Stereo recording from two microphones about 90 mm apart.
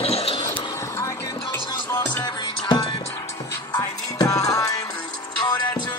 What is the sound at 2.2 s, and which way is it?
Music, 60° left (ahead or behind).